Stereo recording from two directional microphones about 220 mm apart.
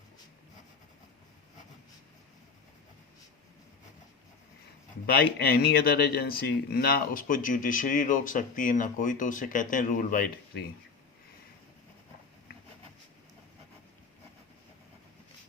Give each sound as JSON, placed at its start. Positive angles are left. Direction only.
{"t": 5.0, "sound": "speech", "side_deg": 45}